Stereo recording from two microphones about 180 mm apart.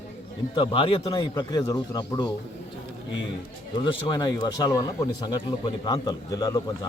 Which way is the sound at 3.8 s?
20° left (ahead or behind).